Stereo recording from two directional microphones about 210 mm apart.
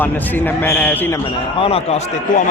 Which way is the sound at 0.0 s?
10° left (ahead or behind).